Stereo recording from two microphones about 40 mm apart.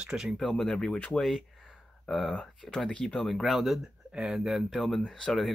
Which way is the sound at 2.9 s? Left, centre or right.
Left.